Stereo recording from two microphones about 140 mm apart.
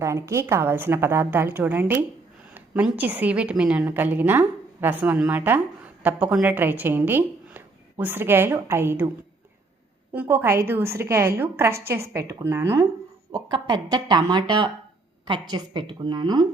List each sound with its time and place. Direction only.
0.0 s a woman's voice: 20° right (ahead or behind)
10.1 s a woman's voice: 15° right (ahead or behind)
13.3 s speech: 30° right (ahead or behind)